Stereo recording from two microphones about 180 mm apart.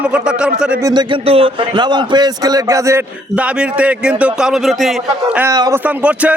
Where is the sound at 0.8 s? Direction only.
25° right (ahead or behind); by 5.4 s centre (ahead or behind).